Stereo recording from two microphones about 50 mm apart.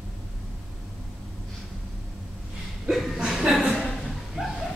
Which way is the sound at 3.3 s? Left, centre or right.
Centre.